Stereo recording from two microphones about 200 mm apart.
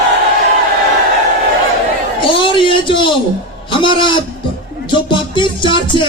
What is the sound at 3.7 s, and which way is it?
A man's voice, 25° left (ahead or behind).